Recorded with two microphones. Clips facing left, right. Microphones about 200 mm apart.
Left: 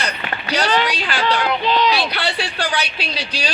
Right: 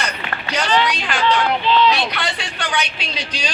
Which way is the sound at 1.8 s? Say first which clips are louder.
Right 1 dB; 35° left (ahead or behind).